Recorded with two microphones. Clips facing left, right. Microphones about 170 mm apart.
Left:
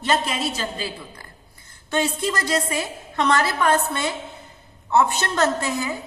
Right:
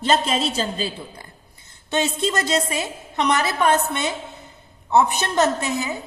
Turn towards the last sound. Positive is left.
turn(degrees=-20)  # may be behind; listen again after turning